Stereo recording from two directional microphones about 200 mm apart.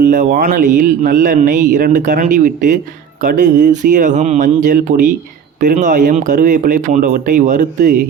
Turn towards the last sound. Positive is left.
turn(degrees=-40)  # may be behind; listen again after turning